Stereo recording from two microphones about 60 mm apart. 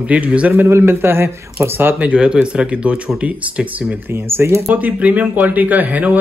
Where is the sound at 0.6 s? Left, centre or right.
Right.